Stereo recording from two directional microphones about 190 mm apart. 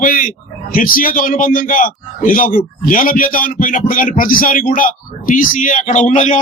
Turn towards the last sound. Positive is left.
turn(degrees=40)  # may be behind; listen again after turning